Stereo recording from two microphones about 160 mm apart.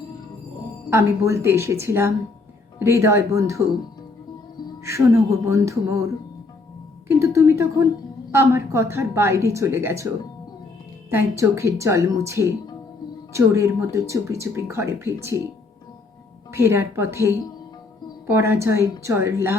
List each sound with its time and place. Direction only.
0.9 s speech: 20° right (ahead or behind)
4.8 s speech: 20° right (ahead or behind)
7.2 s speech: 15° right (ahead or behind)
11.1 s speech: 15° right (ahead or behind)
16.5 s speech: 15° right (ahead or behind)